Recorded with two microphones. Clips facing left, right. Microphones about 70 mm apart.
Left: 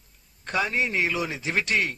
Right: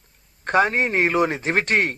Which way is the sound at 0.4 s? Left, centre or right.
Right.